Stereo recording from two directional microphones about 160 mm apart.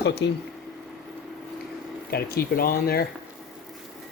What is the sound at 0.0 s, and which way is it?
Speech, 90° left.